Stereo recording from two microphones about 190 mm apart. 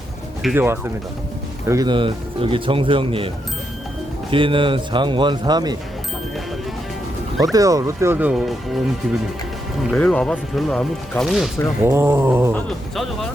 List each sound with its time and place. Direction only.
0.4 s speech: 10° right (ahead or behind); by 3.2 s 30° right (ahead or behind)
4.3 s speech: 25° right (ahead or behind)
7.5 s speech: 20° right (ahead or behind); by 8.8 s centre (ahead or behind)
9.9 s speech: 5° left (ahead or behind)
11.9 s speech: 10° right (ahead or behind)
12.5 s speech: centre (ahead or behind)